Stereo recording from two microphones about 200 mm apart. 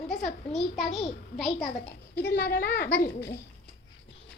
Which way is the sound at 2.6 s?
10° left (ahead or behind).